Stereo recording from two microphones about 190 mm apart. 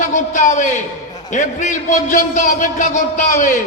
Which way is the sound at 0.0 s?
40° left (ahead or behind).